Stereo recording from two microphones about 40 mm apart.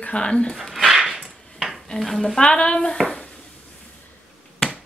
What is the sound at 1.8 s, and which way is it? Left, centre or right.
Stir, centre.